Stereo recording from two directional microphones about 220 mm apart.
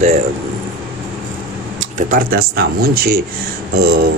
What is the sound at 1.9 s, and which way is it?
Speech, 40° right (ahead or behind).